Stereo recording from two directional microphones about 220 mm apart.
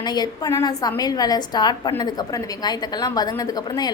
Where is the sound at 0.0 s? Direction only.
20° left (ahead or behind).